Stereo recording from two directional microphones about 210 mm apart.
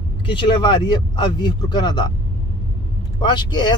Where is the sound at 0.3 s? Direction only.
20° left (ahead or behind).